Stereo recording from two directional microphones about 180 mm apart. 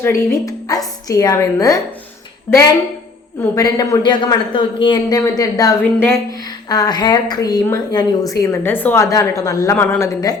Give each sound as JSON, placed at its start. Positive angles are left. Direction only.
{"t": 0.0, "sound": "a woman's voice", "side_deg": 15}
{"t": 3.5, "sound": "a woman's voice", "side_deg": 20}